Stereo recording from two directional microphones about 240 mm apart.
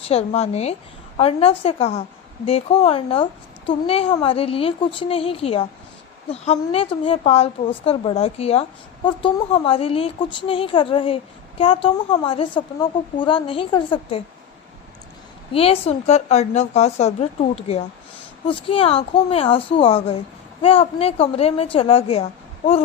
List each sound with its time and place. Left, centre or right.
0.0 s speech: left
15.5 s speech: left